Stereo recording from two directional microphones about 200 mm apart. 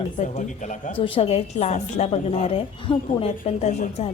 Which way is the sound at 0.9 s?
25° left (ahead or behind).